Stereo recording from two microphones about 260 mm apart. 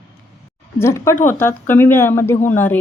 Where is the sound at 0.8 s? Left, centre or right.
Centre.